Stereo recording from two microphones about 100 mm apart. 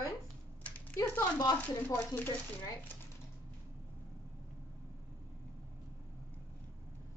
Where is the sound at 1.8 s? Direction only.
20° left (ahead or behind).